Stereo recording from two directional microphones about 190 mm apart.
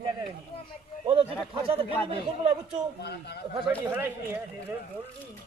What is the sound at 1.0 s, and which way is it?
Speech, 30° right (ahead or behind).